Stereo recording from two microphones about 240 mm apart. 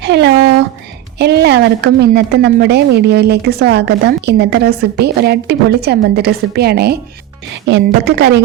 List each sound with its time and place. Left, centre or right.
0.0 s a woman's voice: right